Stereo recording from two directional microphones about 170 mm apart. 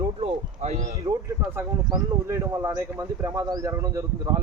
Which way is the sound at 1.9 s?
20° right (ahead or behind).